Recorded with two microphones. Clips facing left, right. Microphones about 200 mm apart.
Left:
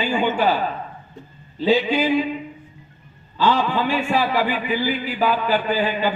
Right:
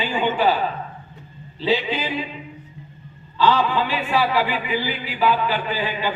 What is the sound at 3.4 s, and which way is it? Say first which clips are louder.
A man's voice: right 1 dB; 45° left (ahead or behind).